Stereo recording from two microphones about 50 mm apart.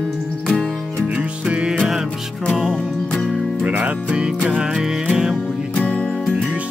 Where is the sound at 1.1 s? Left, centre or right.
Right.